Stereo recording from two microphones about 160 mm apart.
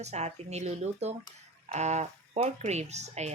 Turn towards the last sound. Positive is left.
turn(degrees=-45)  # may be behind; listen again after turning